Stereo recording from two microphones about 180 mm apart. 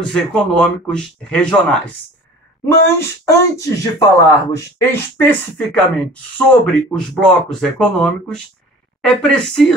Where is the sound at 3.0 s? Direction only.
15° left (ahead or behind).